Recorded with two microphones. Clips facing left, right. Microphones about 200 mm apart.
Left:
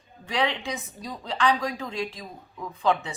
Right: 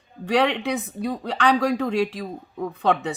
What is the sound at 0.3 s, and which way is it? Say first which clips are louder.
A woman's voice: right 7 dB; 65° right (ahead or behind).